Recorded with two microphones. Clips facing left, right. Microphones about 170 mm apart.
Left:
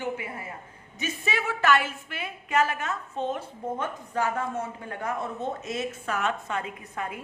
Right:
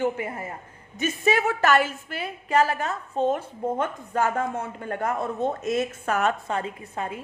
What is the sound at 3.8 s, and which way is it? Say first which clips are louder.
Speech: right 1 dB; 55° right (ahead or behind).